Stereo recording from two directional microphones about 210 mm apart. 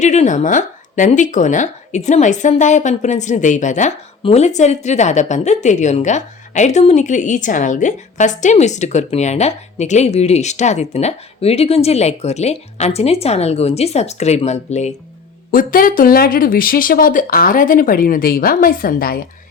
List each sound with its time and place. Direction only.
0.0 s a woman's voice: 35° left (ahead or behind)